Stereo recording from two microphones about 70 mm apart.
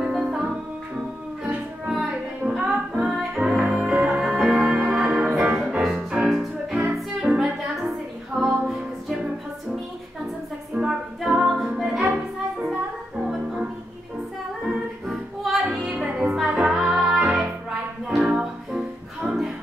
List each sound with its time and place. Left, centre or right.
0.0 s music: centre
1.9 s music: centre
6.2 s music: centre
6.8 s music: centre
8.4 s music: centre
10.7 s music: centre
13.2 s music: centre
14.7 s music: centre
19.2 s music: centre